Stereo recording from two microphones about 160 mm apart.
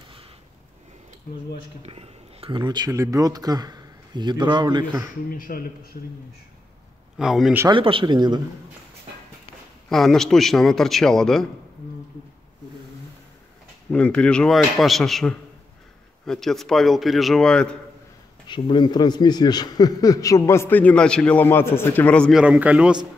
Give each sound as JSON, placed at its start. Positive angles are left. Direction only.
{"t": 1.8, "sound": "speech", "side_deg": -35}
{"t": 5.3, "sound": "a man's voice", "side_deg": 65}
{"t": 7.2, "sound": "a man's voice", "side_deg": 0}
{"t": 7.7, "sound": "speech", "side_deg": -30}
{"t": 9.8, "sound": "a man's voice", "side_deg": 0}
{"t": 13.8, "sound": "a man's voice", "side_deg": 10}
{"t": 18.5, "sound": "a man's voice", "side_deg": 30}
{"t": 22.4, "sound": "a man's voice", "side_deg": -10}